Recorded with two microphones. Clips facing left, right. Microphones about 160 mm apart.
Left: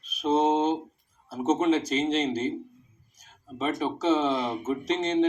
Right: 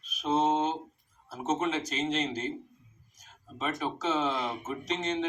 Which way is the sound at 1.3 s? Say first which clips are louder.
Left 7 dB; 30° left (ahead or behind).